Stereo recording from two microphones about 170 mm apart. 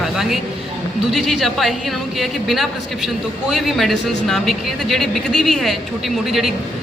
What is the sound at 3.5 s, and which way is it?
Speech, centre (ahead or behind).